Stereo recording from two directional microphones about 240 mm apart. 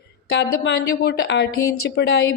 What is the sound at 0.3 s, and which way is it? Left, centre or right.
A woman's voice, left.